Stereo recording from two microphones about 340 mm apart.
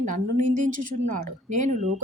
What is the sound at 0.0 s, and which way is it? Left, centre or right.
Speech, right.